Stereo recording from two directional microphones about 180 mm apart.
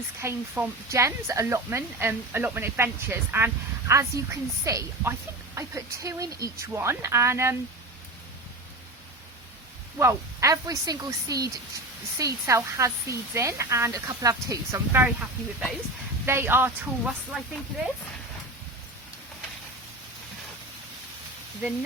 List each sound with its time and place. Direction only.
0.2 s speech: 10° right (ahead or behind)
10.0 s speech: 15° right (ahead or behind)